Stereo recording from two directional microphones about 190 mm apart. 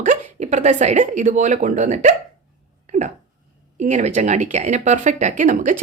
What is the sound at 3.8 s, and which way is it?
A woman's voice, 40° right (ahead or behind).